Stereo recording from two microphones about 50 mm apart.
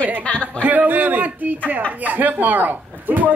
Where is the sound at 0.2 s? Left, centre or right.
Left.